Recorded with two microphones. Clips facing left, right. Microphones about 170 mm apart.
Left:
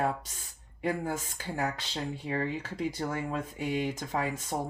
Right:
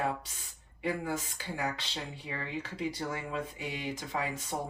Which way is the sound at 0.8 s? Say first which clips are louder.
Left 2 dB; 45° left (ahead or behind).